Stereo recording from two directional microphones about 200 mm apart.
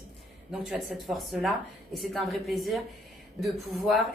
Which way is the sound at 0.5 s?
Centre (ahead or behind).